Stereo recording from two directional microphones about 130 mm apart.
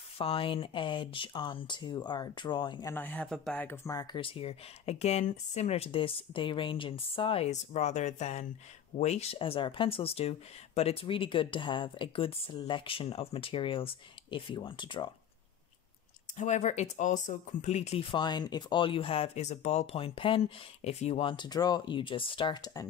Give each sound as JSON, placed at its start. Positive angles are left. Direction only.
{"t": 0.2, "sound": "speech", "side_deg": 45}
{"t": 2.9, "sound": "speech", "side_deg": 15}
{"t": 3.9, "sound": "speech", "side_deg": 35}
{"t": 16.3, "sound": "speech", "side_deg": 65}
{"t": 18.1, "sound": "speech", "side_deg": 35}